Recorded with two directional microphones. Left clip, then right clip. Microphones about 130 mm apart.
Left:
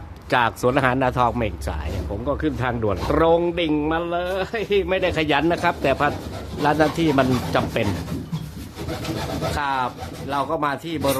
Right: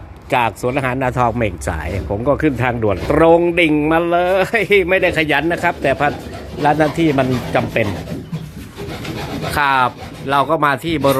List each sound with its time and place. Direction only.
0.3 s speech: 20° left (ahead or behind)
1.0 s speech: centre (ahead or behind)
2.2 s speech: 20° right (ahead or behind)
2.6 s speech: centre (ahead or behind)
3.8 s speech: 15° right (ahead or behind)
5.1 s speech: 15° left (ahead or behind)
9.6 s speech: 25° right (ahead or behind)